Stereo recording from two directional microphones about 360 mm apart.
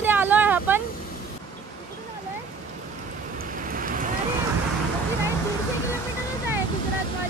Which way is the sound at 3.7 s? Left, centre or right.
Right.